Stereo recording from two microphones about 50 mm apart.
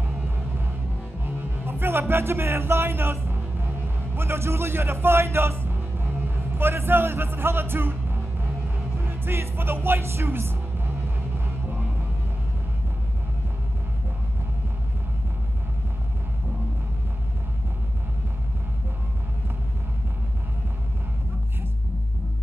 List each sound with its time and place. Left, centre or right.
1.2 s music: right